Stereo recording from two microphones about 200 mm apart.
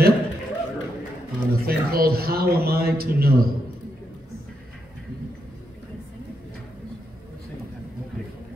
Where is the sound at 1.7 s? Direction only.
50° right (ahead or behind).